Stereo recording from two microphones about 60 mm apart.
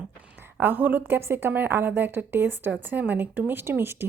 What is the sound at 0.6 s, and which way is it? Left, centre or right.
Speech, right.